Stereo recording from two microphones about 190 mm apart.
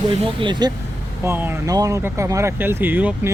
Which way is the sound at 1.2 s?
10° right (ahead or behind).